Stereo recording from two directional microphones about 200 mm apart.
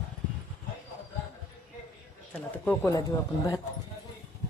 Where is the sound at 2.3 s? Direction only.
10° left (ahead or behind).